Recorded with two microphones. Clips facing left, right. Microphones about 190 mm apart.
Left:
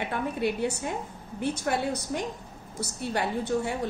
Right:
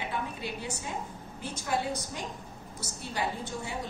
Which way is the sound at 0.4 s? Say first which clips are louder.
Left 10 dB; 60° left (ahead or behind).